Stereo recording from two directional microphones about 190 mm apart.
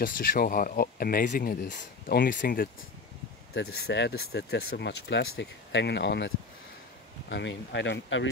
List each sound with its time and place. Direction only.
0.0 s speech: 50° left (ahead or behind)
3.5 s speech: 60° left (ahead or behind)